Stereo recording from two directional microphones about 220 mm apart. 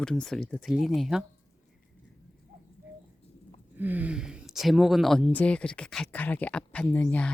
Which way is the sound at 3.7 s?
10° right (ahead or behind).